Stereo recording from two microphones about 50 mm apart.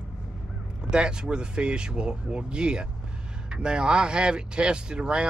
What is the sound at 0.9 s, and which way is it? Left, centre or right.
Speech, centre.